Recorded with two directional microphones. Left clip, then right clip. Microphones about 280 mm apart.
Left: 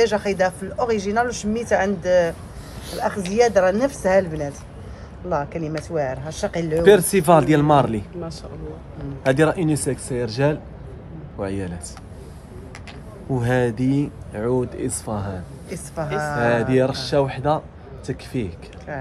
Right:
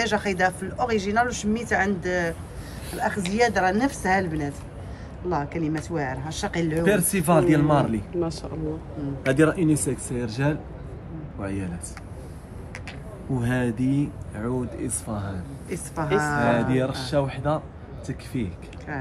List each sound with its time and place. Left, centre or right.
0.0 s speech: centre
6.8 s speech: left
9.2 s speech: left
13.4 s speech: left
15.7 s a woman's voice: centre
16.5 s speech: left